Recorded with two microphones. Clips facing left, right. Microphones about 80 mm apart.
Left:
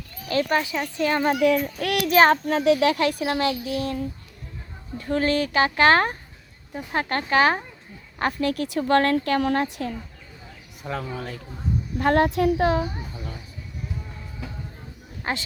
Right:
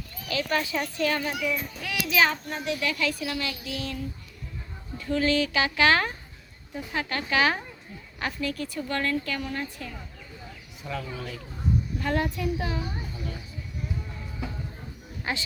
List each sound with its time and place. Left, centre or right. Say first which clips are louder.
0.3 s speech: left 5 dB; left
0.6 s speech: left 2 dB; left
1.4 s speech: left 10 dB; left
2.3 s a child's voice: left 12 dB; left
2.9 s speech: left 6 dB; left
3.6 s a woman's voice: left 7 dB; left
8.2 s speech: left 7 dB; left
10.8 s speech: left 4 dB; left
11.9 s speech: left 13 dB; left
15.2 s speech: left 3 dB; left